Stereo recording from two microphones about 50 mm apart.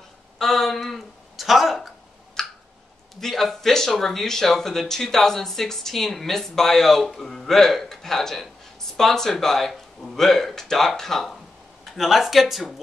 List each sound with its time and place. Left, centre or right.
0.4 s a sound: centre
2.4 s clicking: centre
3.2 s speech: centre